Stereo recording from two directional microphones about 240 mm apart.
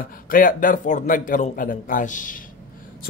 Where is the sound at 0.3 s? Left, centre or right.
Left.